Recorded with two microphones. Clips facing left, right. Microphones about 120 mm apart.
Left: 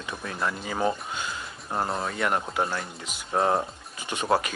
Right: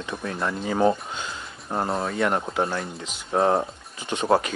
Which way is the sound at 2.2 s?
25° right (ahead or behind).